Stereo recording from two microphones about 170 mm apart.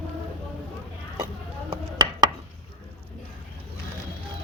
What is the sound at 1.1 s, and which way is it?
Chopping, 25° right (ahead or behind).